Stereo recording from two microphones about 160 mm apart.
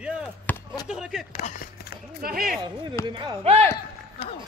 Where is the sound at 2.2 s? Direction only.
65° right (ahead or behind).